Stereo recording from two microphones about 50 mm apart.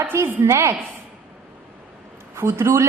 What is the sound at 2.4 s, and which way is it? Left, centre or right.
Speech, right.